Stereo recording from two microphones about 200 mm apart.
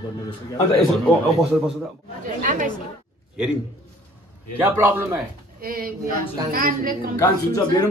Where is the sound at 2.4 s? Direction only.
40° right (ahead or behind).